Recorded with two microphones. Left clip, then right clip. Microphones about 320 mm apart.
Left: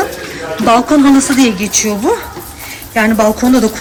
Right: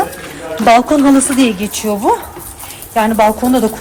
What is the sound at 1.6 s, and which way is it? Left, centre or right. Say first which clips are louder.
Speech: left 6 dB; right.